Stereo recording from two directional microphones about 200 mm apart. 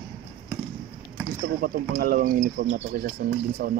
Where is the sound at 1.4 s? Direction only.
45° right (ahead or behind).